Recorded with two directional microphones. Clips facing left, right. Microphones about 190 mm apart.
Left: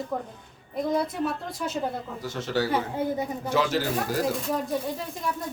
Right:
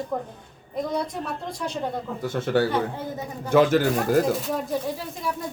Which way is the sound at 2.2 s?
55° right (ahead or behind).